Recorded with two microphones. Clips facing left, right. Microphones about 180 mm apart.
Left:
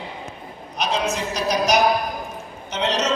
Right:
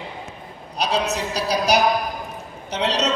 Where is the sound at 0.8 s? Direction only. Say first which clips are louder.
Right 1 dB; 35° right (ahead or behind).